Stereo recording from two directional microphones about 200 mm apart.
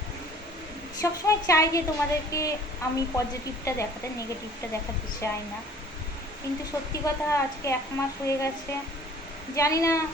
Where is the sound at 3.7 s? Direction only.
15° left (ahead or behind).